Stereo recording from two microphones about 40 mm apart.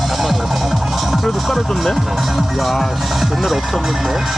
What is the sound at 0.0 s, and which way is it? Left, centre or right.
Music, centre.